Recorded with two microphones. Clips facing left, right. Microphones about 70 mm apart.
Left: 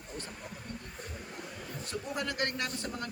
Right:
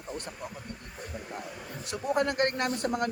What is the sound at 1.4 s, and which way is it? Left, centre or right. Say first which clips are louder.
Speech: right 3 dB; centre.